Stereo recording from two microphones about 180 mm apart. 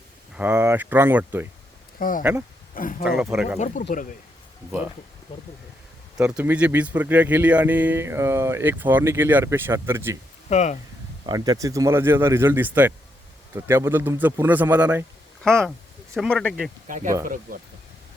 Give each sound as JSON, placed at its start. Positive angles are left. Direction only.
{"t": 0.3, "sound": "speech", "side_deg": -10}
{"t": 2.0, "sound": "speech", "side_deg": 50}
{"t": 3.0, "sound": "speech", "side_deg": -5}
{"t": 6.1, "sound": "speech", "side_deg": -5}
{"t": 10.5, "sound": "speech", "side_deg": 40}
{"t": 11.3, "sound": "speech", "side_deg": -20}
{"t": 15.4, "sound": "speech", "side_deg": 5}
{"t": 16.9, "sound": "speech", "side_deg": -45}